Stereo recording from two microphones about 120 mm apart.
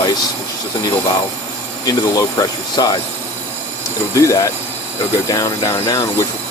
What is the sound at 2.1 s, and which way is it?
Speech, 30° left (ahead or behind).